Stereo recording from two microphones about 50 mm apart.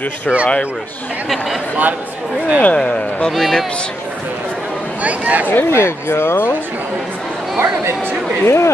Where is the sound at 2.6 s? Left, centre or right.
Left.